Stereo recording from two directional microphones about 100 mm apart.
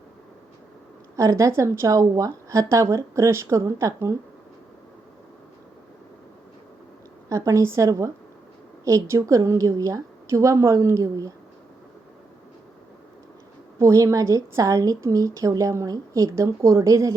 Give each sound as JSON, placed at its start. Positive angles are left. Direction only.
{"t": 1.1, "sound": "a woman's voice", "side_deg": -30}
{"t": 7.3, "sound": "a woman's voice", "side_deg": -30}
{"t": 13.7, "sound": "a woman's voice", "side_deg": -30}